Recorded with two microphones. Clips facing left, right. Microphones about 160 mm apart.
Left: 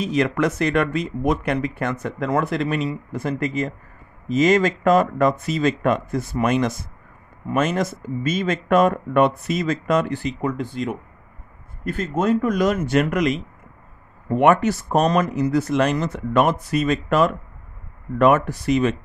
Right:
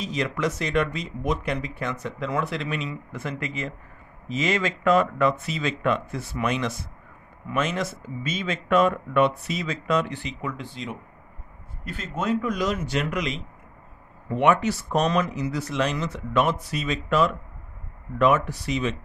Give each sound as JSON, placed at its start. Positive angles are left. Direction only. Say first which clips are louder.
{"t": 0.0, "sound": "speech", "louder": "left 6 dB", "side_deg": 55}